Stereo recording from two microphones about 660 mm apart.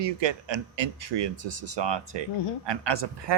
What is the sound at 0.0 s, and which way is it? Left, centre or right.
Speech, right.